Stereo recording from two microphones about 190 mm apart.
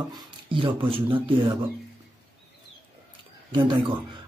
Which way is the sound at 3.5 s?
25° right (ahead or behind).